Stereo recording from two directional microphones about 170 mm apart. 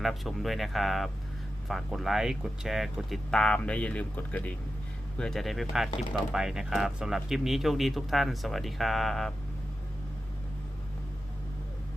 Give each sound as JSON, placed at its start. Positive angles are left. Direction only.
{"t": 0.0, "sound": "speech", "side_deg": 0}